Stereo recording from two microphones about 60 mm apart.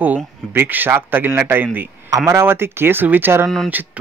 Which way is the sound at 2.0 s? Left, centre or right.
Right.